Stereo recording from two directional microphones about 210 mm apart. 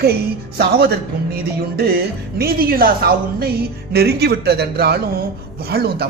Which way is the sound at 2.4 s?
45° right (ahead or behind).